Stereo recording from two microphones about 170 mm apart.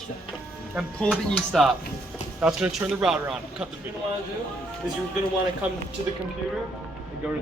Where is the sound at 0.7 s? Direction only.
Centre (ahead or behind).